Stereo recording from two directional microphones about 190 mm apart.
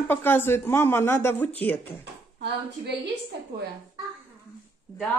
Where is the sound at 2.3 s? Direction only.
60° right (ahead or behind).